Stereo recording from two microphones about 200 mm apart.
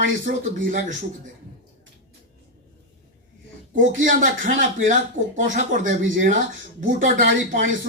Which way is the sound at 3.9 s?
40° right (ahead or behind).